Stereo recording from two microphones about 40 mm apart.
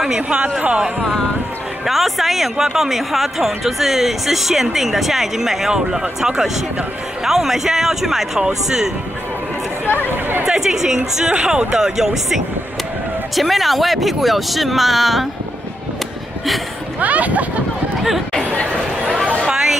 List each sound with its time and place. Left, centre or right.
0.0 s speech: centre
1.9 s speech: centre
9.8 s speech: left
10.4 s speech: centre
12.0 s speech: centre
13.4 s speech: centre
17.0 s speech: right
18.3 s chatter: left
19.5 s a sound: centre